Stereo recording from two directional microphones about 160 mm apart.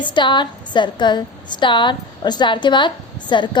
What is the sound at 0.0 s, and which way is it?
A woman's voice, 30° left (ahead or behind).